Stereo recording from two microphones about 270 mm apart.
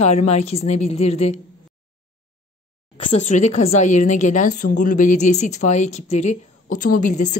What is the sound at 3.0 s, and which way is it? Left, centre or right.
A woman's voice, left.